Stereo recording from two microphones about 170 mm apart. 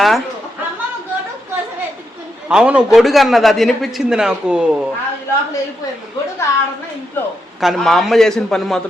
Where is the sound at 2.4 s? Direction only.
5° right (ahead or behind).